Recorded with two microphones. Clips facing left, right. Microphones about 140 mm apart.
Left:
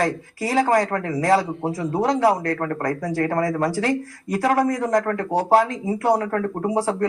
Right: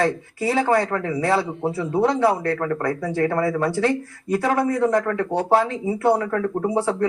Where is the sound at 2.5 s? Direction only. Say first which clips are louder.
Right 1 dB; 40° left (ahead or behind).